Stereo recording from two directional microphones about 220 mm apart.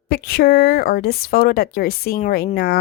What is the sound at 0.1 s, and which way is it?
A woman's voice, 45° left (ahead or behind).